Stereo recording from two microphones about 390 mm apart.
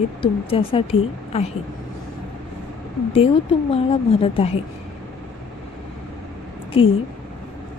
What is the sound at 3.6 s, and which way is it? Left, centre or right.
Speech, centre.